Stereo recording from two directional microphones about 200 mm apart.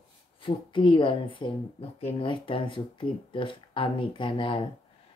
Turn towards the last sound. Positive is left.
turn(degrees=25)  # may be behind; listen again after turning